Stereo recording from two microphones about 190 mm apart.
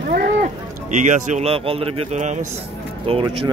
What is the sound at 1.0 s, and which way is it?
A man's voice, 40° right (ahead or behind).